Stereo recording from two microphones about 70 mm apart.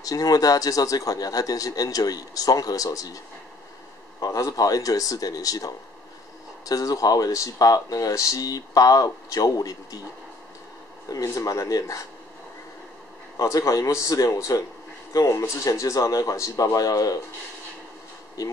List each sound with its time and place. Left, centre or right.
0.0 s speech: left
4.2 s speech: left
11.1 s speech: left
13.4 s speech: left